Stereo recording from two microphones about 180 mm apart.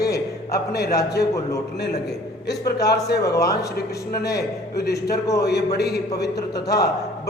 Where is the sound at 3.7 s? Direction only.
60° left (ahead or behind).